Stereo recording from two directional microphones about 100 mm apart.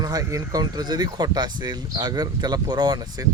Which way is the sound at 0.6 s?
45° right (ahead or behind).